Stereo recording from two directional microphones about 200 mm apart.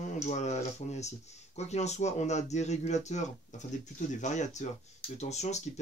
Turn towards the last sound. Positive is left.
turn(degrees=35)  # may be behind; listen again after turning